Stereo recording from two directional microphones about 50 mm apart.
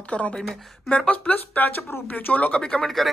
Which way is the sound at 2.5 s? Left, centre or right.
Centre.